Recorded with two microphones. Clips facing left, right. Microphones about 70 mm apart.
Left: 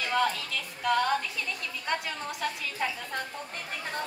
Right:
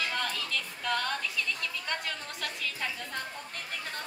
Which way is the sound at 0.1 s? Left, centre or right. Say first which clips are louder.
Left 7 dB; centre.